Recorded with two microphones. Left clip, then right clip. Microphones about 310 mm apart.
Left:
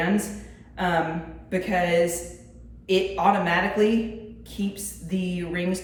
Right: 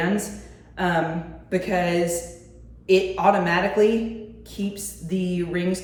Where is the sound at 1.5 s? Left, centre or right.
Centre.